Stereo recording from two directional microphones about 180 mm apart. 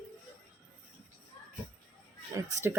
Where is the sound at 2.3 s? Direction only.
15° right (ahead or behind).